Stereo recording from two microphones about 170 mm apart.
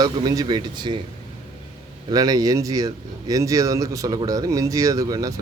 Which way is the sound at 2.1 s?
20° right (ahead or behind).